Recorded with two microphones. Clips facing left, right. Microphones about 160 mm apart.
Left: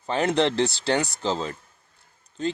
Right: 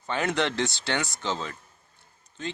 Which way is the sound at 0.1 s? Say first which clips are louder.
Left 5 dB; 30° left (ahead or behind).